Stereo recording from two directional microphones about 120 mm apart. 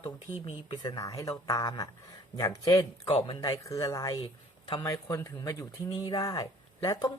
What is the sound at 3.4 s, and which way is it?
Speech, 30° left (ahead or behind).